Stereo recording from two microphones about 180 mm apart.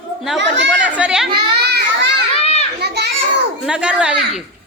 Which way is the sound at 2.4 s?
35° left (ahead or behind).